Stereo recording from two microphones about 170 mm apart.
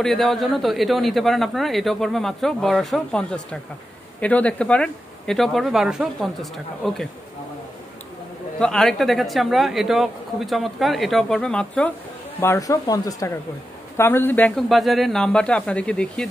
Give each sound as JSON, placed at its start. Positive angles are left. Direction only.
{"t": 0.0, "sound": "speech", "side_deg": 0}
{"t": 8.5, "sound": "speech", "side_deg": 5}
{"t": 12.4, "sound": "speech", "side_deg": 15}